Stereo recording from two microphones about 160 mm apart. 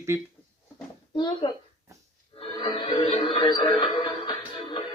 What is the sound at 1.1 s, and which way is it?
Speech, 30° left (ahead or behind).